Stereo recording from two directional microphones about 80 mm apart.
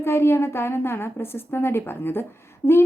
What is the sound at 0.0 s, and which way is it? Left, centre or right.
A woman's voice, left.